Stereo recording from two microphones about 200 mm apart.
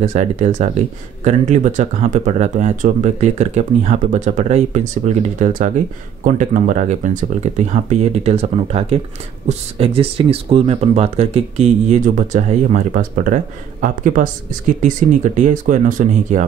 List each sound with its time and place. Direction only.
0.0 s speech: 35° right (ahead or behind)